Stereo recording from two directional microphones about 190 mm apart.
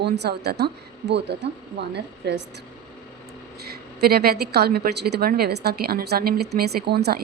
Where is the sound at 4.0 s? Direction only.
55° right (ahead or behind).